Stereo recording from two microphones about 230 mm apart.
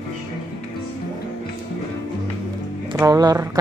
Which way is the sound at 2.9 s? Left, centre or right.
Centre.